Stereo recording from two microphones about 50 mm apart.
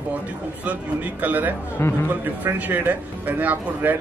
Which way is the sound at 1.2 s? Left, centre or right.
Right.